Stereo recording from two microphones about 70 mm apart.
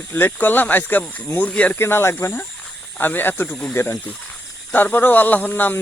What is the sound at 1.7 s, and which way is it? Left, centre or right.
A man's voice, left.